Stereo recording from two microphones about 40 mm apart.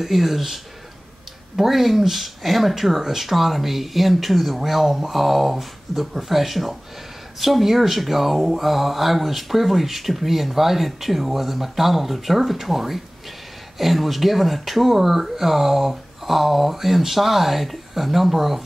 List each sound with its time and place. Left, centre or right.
0.0 s speech: centre
1.6 s speech: centre